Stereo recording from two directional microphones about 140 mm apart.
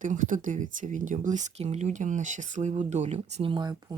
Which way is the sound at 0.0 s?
65° right (ahead or behind).